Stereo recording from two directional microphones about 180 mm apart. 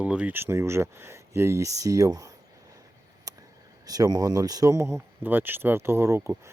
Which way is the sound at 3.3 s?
20° right (ahead or behind).